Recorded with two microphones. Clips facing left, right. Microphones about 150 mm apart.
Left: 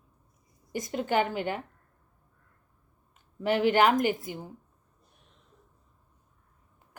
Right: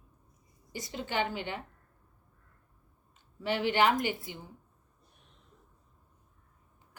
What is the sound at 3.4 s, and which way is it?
A woman's voice, 50° left (ahead or behind).